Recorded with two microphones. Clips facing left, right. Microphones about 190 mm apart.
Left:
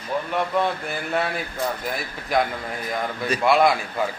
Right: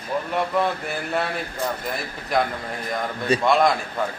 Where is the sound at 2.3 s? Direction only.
Centre (ahead or behind).